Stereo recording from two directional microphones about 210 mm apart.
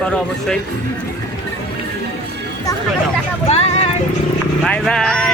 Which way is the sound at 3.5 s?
30° left (ahead or behind).